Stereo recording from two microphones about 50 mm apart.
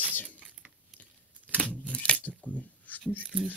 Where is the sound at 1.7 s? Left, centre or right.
Left.